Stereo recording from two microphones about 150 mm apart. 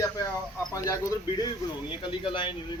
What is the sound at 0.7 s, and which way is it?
Speech, 20° left (ahead or behind).